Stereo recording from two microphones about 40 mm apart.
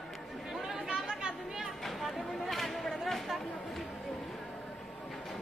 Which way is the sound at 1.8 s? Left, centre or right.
Centre.